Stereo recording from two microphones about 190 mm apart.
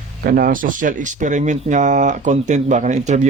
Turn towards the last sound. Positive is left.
turn(degrees=-40)  # may be behind; listen again after turning